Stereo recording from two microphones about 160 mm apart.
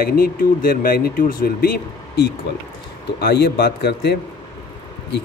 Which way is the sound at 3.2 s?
90° left.